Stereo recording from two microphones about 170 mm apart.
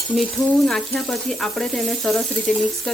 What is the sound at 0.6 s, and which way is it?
Speech, centre (ahead or behind).